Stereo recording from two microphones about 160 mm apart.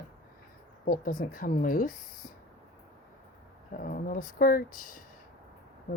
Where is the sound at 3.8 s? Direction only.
55° left (ahead or behind).